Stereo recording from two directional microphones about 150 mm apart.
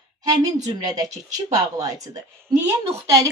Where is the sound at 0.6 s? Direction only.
25° right (ahead or behind).